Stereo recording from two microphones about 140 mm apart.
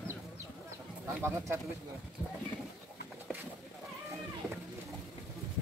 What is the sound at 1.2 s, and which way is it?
Speech, 20° right (ahead or behind).